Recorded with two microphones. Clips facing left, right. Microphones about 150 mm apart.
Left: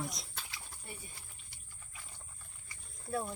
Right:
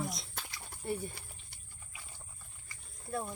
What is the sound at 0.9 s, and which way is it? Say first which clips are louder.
Speech: right 15 dB; 60° right (ahead or behind).